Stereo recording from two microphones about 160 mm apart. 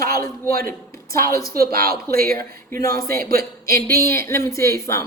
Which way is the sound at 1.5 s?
70° right (ahead or behind).